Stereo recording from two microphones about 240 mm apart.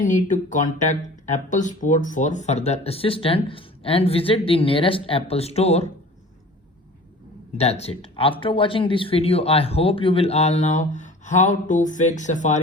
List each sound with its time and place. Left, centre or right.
0.0 s speech: left
7.6 s speech: left